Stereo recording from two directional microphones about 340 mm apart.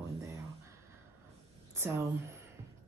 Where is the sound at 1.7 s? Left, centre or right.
Centre.